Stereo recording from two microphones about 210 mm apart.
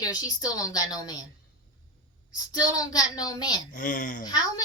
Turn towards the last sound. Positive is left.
turn(degrees=20)  # may be behind; listen again after turning